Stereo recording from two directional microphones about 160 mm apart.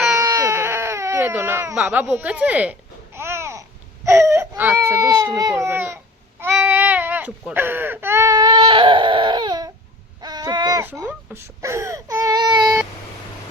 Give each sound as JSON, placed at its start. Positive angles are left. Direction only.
{"t": 0.1, "sound": "baby cry", "side_deg": -20}
{"t": 2.1, "sound": "speech", "side_deg": -10}
{"t": 6.4, "sound": "baby cry", "side_deg": -15}
{"t": 10.2, "sound": "owl", "side_deg": -25}
{"t": 10.8, "sound": "baby cry", "side_deg": -10}